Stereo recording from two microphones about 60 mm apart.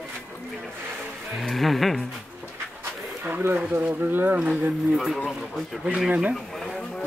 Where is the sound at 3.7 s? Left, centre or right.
Right.